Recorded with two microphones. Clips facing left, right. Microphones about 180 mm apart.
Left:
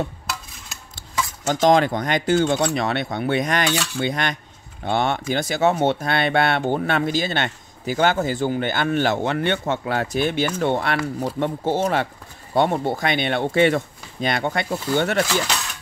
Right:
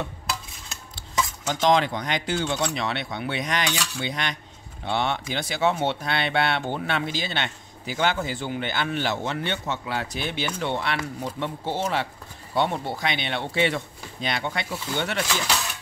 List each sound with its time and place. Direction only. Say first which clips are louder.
1.5 s speech: left 5 dB; 45° left (ahead or behind)